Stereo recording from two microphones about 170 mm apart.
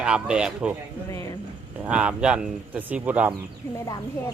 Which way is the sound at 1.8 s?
5° right (ahead or behind).